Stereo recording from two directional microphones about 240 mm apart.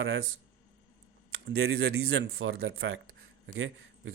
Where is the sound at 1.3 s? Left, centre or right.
Right.